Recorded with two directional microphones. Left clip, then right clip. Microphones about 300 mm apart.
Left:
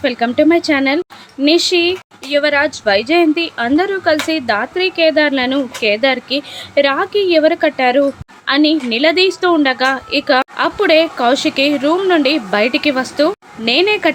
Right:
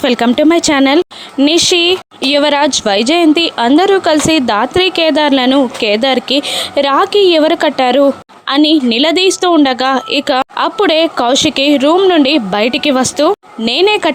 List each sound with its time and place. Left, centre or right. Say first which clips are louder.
0.0 s a woman's voice: right 3 dB; right